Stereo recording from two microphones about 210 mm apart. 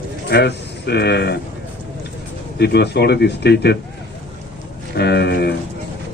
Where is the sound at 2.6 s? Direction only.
50° left (ahead or behind).